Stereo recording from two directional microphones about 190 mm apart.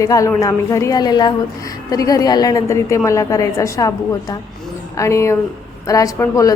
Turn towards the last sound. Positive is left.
turn(degrees=15)  # may be behind; listen again after turning